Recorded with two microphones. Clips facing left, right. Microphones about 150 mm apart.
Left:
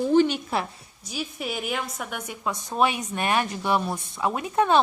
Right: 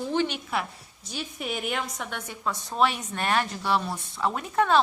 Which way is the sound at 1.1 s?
5° left (ahead or behind).